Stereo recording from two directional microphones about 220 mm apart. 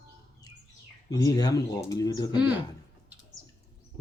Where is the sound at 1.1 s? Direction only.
15° left (ahead or behind).